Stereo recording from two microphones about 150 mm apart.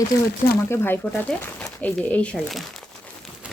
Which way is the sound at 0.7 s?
15° left (ahead or behind).